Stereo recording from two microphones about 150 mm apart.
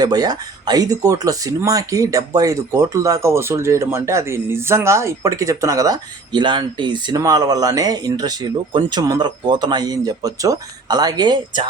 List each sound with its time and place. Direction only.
0.0 s speech: 25° right (ahead or behind)